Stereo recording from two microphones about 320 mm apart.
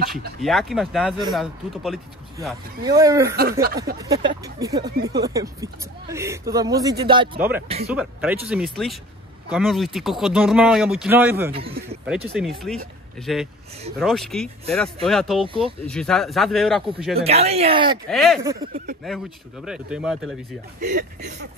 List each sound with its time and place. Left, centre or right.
0.4 s speech: centre
3.6 s speech: right
4.0 s speech: centre
7.6 s speech: centre
7.9 s speech: centre
15.4 s speech: centre
15.8 s speech: centre
17.2 s speech: centre
18.1 s speech: centre
18.4 s speech: centre
20.8 s speech: right